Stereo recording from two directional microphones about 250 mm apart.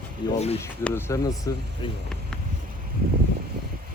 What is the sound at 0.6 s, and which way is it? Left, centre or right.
Speech, centre.